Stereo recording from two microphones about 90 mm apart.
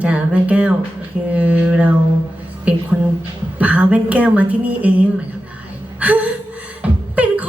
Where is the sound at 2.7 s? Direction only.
15° right (ahead or behind).